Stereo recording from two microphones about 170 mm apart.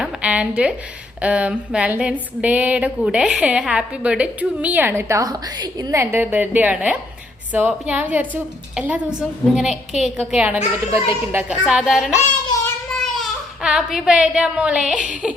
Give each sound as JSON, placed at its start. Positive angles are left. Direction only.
{"t": 0.0, "sound": "a sound", "side_deg": -5}
{"t": 8.7, "sound": "a woman's voice", "side_deg": -5}
{"t": 10.9, "sound": "a sound", "side_deg": -15}
{"t": 11.6, "sound": "a woman's voice", "side_deg": 0}
{"t": 12.1, "sound": "child singing", "side_deg": 15}
{"t": 12.9, "sound": "a child's voice", "side_deg": 0}